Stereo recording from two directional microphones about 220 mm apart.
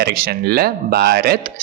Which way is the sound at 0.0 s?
45° right (ahead or behind).